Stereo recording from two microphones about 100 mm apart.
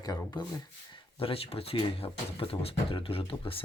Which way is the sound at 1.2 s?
70° left (ahead or behind).